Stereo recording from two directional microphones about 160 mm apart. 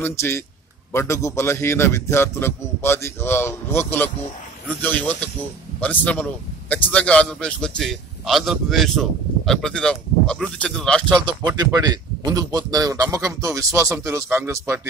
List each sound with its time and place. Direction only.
0.0 s a man's voice: 15° left (ahead or behind)
11.2 s a man's voice: 25° right (ahead or behind)